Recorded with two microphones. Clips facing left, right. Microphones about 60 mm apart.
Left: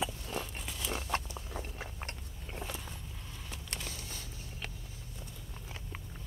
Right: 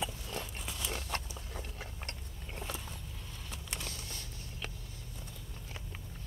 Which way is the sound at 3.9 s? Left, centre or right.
Centre.